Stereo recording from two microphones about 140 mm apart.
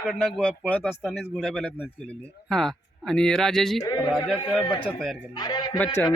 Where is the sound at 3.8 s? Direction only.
25° left (ahead or behind).